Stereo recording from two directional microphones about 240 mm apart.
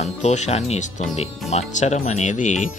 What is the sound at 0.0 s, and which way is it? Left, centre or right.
Speech, left.